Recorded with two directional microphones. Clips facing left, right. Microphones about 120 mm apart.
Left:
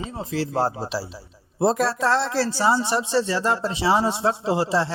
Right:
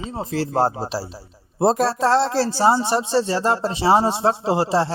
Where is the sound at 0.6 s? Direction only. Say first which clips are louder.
Right 3 dB; 30° right (ahead or behind).